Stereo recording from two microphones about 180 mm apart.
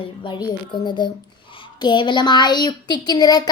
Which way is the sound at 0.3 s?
25° left (ahead or behind).